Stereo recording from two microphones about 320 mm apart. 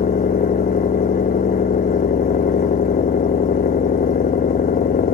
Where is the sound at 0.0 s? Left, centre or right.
Left.